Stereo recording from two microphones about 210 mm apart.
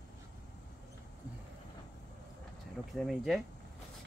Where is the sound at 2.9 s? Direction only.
Centre (ahead or behind).